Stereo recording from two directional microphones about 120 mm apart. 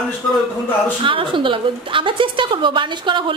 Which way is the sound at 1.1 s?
45° right (ahead or behind).